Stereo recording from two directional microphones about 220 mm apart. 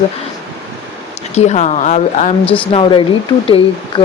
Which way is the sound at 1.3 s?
30° left (ahead or behind).